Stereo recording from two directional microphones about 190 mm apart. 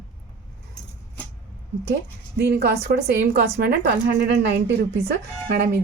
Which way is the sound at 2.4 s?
60° right (ahead or behind).